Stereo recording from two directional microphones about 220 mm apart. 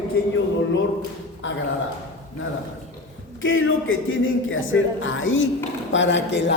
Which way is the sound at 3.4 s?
60° left (ahead or behind).